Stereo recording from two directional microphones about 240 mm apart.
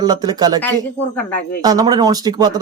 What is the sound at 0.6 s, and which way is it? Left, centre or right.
Speech, centre.